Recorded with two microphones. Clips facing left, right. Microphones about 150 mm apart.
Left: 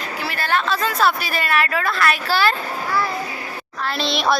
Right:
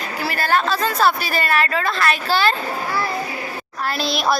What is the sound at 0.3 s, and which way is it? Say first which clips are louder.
Speech: right 2 dB; 40° right (ahead or behind).